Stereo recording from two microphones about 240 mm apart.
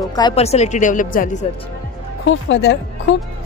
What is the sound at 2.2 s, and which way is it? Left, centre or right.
Speech, left.